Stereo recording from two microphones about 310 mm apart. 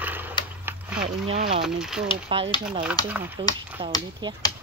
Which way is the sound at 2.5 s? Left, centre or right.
Centre.